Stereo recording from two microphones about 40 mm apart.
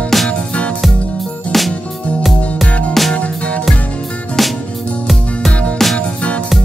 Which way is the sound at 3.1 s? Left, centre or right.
Left.